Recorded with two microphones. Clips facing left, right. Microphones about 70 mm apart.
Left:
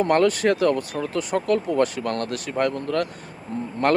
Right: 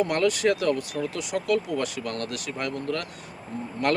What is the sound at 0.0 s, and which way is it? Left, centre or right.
Speech, left.